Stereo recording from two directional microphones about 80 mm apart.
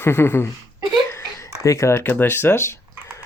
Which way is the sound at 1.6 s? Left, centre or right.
Left.